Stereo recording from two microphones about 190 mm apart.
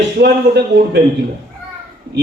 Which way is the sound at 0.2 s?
60° right (ahead or behind).